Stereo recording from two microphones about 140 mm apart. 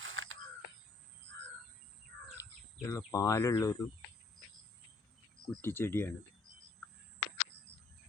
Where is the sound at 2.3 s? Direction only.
20° left (ahead or behind).